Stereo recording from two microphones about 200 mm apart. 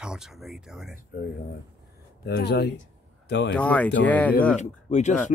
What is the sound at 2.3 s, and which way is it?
Speech, 50° left (ahead or behind).